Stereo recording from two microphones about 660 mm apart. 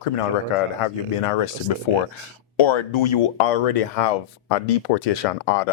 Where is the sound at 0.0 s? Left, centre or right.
Left.